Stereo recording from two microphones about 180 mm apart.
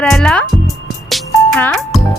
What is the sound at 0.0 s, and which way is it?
Speech, 5° left (ahead or behind).